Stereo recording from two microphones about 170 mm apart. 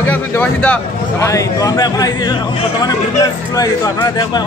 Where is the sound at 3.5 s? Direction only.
20° left (ahead or behind).